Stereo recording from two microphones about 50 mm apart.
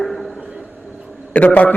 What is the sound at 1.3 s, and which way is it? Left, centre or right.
Speech, left.